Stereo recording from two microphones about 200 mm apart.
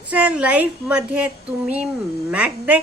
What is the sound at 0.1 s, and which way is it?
Music, 5° right (ahead or behind).